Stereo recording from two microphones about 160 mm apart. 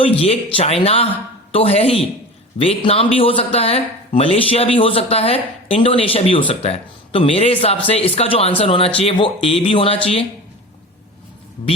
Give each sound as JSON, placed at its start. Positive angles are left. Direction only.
{"t": 0.0, "sound": "speech", "side_deg": 35}